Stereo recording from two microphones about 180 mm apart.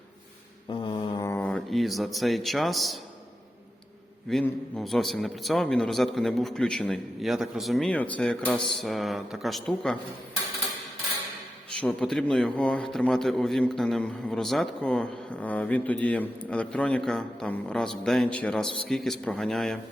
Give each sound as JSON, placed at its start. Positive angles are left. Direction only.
{"t": 0.7, "sound": "mantra", "side_deg": 30}
{"t": 1.2, "sound": "a man's voice", "side_deg": 10}
{"t": 4.3, "sound": "a man's voice", "side_deg": 0}
{"t": 11.8, "sound": "a man's voice", "side_deg": 5}